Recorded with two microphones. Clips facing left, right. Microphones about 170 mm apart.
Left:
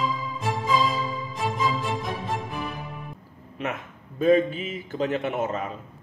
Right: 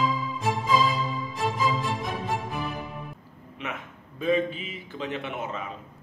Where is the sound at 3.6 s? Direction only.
45° left (ahead or behind).